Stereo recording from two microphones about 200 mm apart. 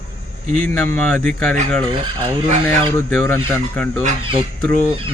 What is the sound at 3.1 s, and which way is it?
Speech, 5° left (ahead or behind).